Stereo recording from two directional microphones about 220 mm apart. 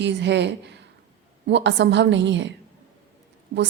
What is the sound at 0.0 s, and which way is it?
A woman's voice, 50° right (ahead or behind).